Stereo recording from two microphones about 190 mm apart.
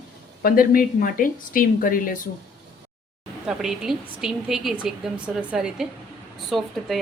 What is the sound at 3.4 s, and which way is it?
Speech, 5° right (ahead or behind).